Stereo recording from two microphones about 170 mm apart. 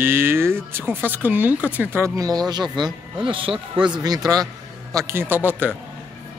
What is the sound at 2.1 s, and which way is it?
A man's voice, 20° right (ahead or behind).